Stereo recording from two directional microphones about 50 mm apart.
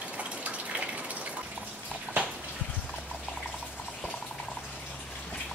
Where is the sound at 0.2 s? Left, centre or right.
Right.